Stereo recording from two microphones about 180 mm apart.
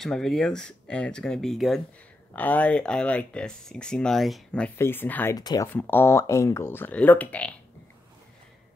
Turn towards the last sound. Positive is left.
turn(degrees=5)  # may be behind; listen again after turning